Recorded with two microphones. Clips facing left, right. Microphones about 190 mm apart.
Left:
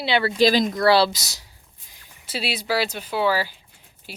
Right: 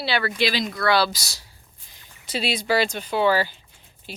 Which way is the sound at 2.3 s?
5° left (ahead or behind).